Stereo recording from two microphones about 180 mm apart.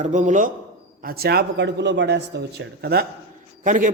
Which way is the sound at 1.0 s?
55° right (ahead or behind).